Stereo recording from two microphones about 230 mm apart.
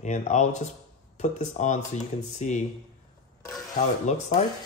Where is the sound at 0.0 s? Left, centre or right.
Left.